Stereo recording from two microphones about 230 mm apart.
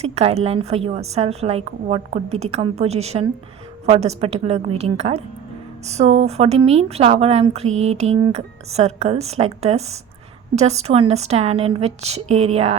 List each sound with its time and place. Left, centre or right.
0.0 s a woman's voice: right